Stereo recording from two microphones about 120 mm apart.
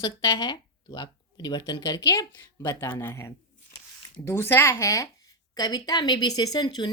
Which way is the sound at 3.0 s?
20° left (ahead or behind).